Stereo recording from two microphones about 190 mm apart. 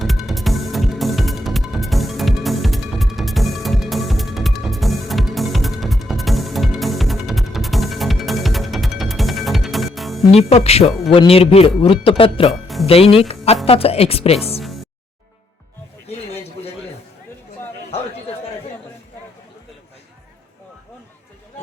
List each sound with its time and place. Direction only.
0.0 s music: centre (ahead or behind)
10.3 s a woman's voice: 35° left (ahead or behind)
16.0 s a sound: 35° left (ahead or behind)